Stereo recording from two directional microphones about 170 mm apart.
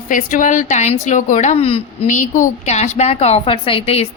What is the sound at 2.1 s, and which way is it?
A woman's voice, 45° left (ahead or behind).